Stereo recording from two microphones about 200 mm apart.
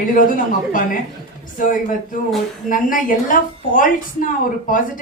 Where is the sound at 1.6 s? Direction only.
40° left (ahead or behind).